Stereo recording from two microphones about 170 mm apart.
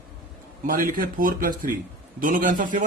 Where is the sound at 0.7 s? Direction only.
50° right (ahead or behind).